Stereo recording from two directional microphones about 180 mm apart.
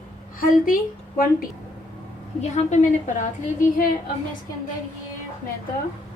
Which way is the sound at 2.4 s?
40° left (ahead or behind).